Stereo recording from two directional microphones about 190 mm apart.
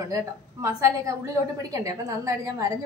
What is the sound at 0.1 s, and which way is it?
A woman's voice, 15° right (ahead or behind).